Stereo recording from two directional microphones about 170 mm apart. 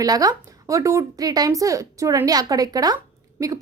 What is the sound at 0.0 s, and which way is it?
A woman's voice, 20° right (ahead or behind).